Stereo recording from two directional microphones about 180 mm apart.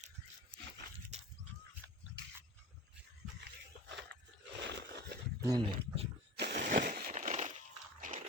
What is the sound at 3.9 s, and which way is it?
Biting, 70° right (ahead or behind).